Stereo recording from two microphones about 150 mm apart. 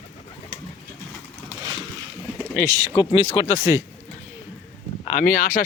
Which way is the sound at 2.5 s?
20° right (ahead or behind).